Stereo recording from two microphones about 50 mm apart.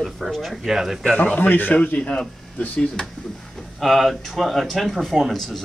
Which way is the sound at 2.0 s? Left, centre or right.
Left.